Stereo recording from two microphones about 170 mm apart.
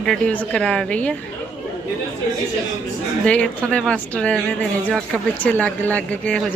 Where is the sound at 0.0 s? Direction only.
5° left (ahead or behind).